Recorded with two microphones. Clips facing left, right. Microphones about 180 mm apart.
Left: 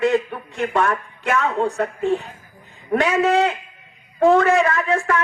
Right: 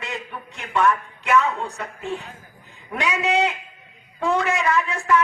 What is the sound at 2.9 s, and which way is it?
Speech, 45° left (ahead or behind).